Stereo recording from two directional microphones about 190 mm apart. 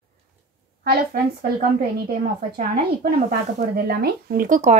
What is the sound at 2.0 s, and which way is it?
Speech, 50° right (ahead or behind).